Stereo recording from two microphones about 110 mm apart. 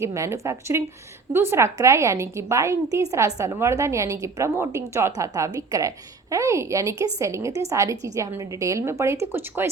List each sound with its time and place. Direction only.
0.0 s a woman's voice: 25° right (ahead or behind)